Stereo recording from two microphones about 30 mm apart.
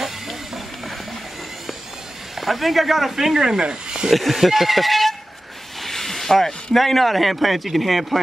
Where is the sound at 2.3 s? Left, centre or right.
Centre.